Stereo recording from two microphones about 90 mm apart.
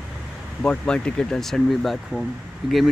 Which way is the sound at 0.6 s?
10° left (ahead or behind).